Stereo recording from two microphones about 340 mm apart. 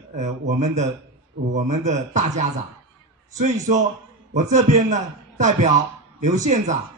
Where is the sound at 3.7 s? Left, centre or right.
Right.